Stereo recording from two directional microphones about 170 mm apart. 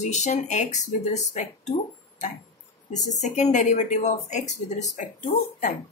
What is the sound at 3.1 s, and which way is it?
Speech, 45° left (ahead or behind).